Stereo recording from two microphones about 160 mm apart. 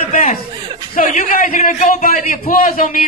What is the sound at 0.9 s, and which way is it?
A man's voice, 60° left (ahead or behind).